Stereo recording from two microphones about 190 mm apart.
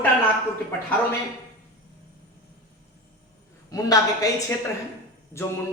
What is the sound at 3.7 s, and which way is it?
Speech, 20° left (ahead or behind).